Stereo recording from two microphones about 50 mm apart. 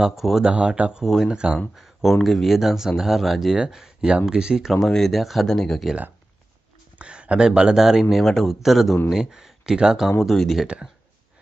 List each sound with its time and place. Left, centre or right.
0.0 s speech: centre
0.4 s speech: centre
1.0 s speech: centre
1.3 s speech: centre
1.8 s speech: centre
4.8 s speech: centre
7.0 s speech: right
10.3 s speech: centre